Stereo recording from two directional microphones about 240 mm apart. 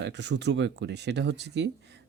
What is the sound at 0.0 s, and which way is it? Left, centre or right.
Speech, right.